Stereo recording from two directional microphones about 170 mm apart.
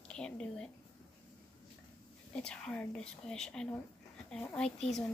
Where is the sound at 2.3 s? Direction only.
5° left (ahead or behind).